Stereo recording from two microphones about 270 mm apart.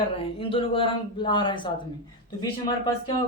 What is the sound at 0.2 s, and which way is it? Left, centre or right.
A man's voice, centre.